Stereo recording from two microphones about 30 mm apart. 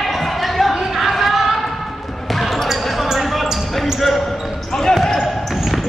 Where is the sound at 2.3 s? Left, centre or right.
Centre.